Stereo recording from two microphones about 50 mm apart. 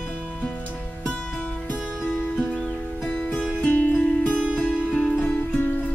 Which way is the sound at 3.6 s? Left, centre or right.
Left.